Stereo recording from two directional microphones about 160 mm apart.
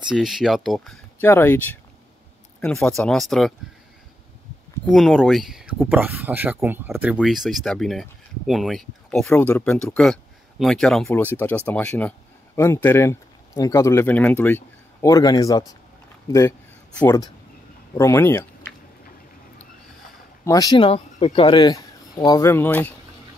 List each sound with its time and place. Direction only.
0.1 s speech: 5° right (ahead or behind)
1.2 s speech: 15° left (ahead or behind)
2.6 s speech: 5° left (ahead or behind)
4.9 s speech: centre (ahead or behind)
9.3 s speech: 15° left (ahead or behind)
20.4 s speech: 25° left (ahead or behind)
22.5 s speech: 10° left (ahead or behind)